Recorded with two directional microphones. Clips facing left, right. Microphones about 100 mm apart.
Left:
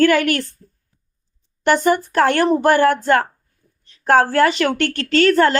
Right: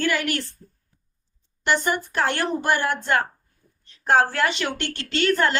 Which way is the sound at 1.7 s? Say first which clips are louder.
Left 7 dB; 45° left (ahead or behind).